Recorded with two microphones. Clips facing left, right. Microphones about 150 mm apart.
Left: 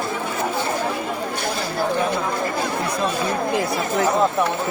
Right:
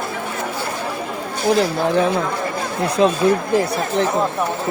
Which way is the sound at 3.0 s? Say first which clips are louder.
Right 10 dB; 90° right.